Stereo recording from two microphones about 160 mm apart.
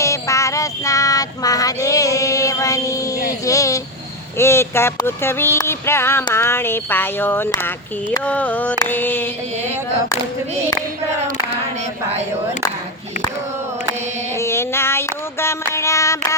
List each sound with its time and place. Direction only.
0.0 s child singing: 20° left (ahead or behind)
3.4 s vehicle: 20° left (ahead or behind)
4.4 s speech: 15° left (ahead or behind)
14.3 s a sound: 15° left (ahead or behind)